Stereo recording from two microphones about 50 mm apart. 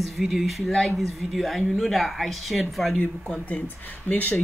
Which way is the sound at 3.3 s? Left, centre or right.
Left.